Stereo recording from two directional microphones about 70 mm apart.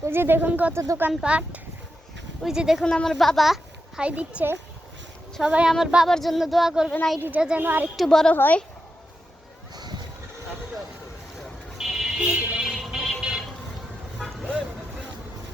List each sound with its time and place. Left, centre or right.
0.0 s speech: right
0.7 s speech: right
1.2 s speech: centre
2.4 s speech: centre
2.8 s a child's voice: centre
4.0 s speech: centre
6.1 s speech: centre
7.2 s speech: right
7.9 s speech: centre
8.3 s speech: left
11.8 s a sound: centre
12.6 s music: centre
14.2 s vehicle: centre